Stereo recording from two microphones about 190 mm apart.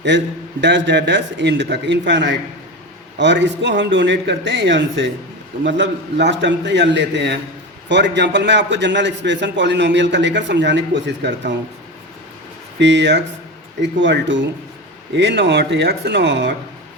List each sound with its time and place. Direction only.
0.1 s a man's voice: 70° right (ahead or behind)
12.8 s a man's voice: 70° right (ahead or behind)